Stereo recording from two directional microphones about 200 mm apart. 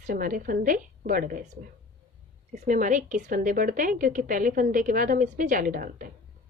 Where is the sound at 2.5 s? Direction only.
40° right (ahead or behind).